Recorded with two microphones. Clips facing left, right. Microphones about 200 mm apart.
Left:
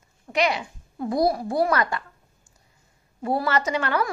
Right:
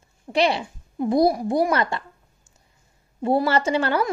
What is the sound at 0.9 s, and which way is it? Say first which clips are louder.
A woman's voice: right 4 dB; 20° right (ahead or behind).